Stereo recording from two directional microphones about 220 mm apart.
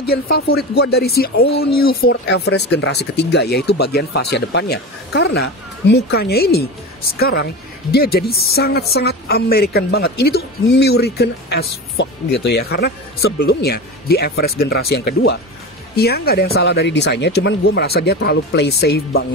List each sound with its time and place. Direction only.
0.0 s speech: 45° left (ahead or behind)